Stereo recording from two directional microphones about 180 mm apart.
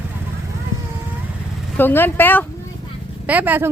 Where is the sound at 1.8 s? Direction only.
10° left (ahead or behind).